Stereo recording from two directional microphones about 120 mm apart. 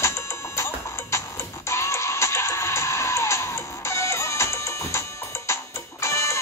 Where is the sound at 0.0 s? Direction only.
25° left (ahead or behind).